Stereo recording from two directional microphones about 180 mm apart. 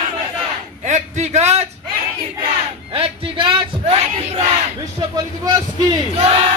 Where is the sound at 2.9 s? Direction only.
30° right (ahead or behind).